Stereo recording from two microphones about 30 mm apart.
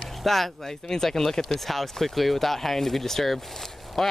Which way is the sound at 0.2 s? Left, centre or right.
Centre.